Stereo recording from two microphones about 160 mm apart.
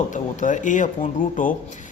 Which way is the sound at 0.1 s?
50° left (ahead or behind).